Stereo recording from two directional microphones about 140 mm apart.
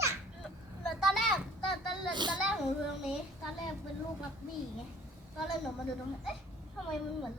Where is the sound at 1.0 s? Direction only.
Centre (ahead or behind).